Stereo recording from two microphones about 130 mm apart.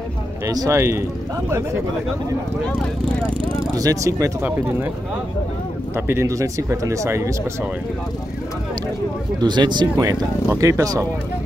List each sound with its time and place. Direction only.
0.5 s speech: 25° right (ahead or behind)
3.7 s speech: 25° right (ahead or behind)
5.9 s speech: 20° right (ahead or behind)
9.4 s speech: 35° right (ahead or behind)
10.5 s speech: 25° right (ahead or behind)